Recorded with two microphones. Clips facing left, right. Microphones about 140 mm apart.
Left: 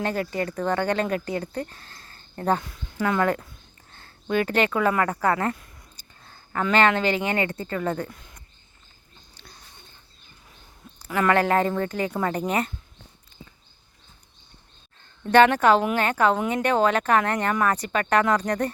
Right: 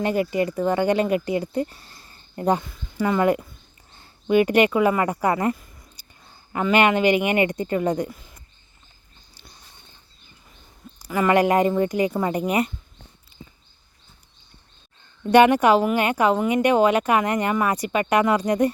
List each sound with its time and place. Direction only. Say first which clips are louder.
0.0 s speech: right 5 dB; 10° right (ahead or behind)
2.6 s speech: right 2 dB; centre (ahead or behind)
5.5 s a sound: right 1 dB; centre (ahead or behind)
6.0 s speech: even; 10° right (ahead or behind)
8.1 s speech: right 4 dB; 5° right (ahead or behind)
11.0 s speech: right 3 dB; 10° right (ahead or behind)
15.3 s speech: right 2 dB; 15° right (ahead or behind)